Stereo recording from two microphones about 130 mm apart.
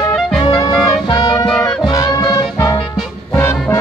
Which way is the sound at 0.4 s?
30° left (ahead or behind).